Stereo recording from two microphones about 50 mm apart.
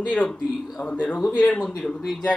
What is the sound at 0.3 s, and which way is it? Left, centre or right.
Speech, centre.